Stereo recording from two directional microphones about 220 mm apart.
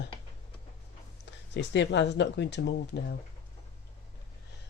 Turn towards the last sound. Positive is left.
turn(degrees=50)  # may be behind; listen again after turning